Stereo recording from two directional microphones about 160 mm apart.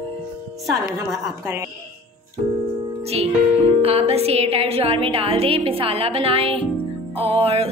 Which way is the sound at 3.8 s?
40° right (ahead or behind).